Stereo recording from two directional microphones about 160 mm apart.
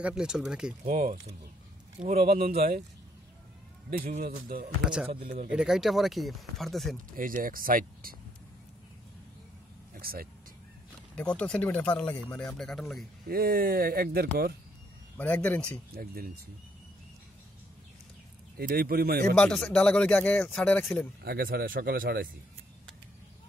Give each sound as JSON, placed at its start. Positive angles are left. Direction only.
{"t": 0.0, "sound": "speech", "side_deg": -5}
{"t": 0.8, "sound": "speech", "side_deg": -55}
{"t": 2.3, "sound": "speech", "side_deg": -40}
{"t": 4.2, "sound": "speech", "side_deg": -65}
{"t": 5.5, "sound": "speech", "side_deg": -5}
{"t": 7.2, "sound": "speech", "side_deg": -60}
{"t": 9.9, "sound": "vehicle", "side_deg": -70}
{"t": 11.1, "sound": "speech", "side_deg": 5}
{"t": 13.3, "sound": "speech", "side_deg": -70}
{"t": 15.1, "sound": "speech", "side_deg": 10}
{"t": 15.9, "sound": "speech", "side_deg": -65}
{"t": 18.6, "sound": "speech", "side_deg": -70}
{"t": 19.3, "sound": "speech", "side_deg": 5}
{"t": 21.2, "sound": "speech", "side_deg": -70}